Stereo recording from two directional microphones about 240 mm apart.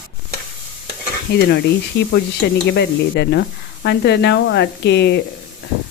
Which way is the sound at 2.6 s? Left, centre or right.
Left.